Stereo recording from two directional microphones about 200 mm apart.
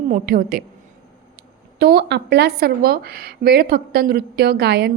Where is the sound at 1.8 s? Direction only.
50° right (ahead or behind).